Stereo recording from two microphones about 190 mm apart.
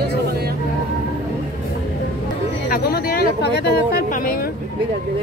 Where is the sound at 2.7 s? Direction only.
55° left (ahead or behind).